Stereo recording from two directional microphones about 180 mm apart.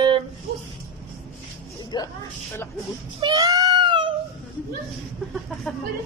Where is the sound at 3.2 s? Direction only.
20° right (ahead or behind).